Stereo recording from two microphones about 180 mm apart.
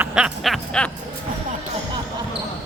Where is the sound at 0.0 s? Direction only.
5° right (ahead or behind).